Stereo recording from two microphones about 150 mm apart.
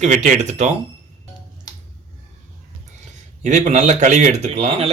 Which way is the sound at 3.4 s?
55° right (ahead or behind).